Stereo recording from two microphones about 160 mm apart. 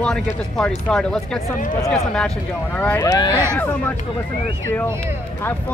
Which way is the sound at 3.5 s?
10° left (ahead or behind).